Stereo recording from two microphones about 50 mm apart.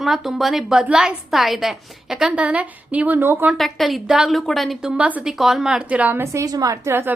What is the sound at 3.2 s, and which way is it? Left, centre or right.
Speech, right.